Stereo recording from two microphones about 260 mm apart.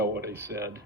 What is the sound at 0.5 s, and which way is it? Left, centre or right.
Speech, right.